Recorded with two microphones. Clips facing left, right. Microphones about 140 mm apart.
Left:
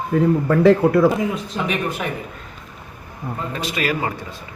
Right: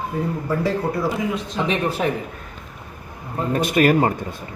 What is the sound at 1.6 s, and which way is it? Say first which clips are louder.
Speech: right 3 dB; 30° right (ahead or behind).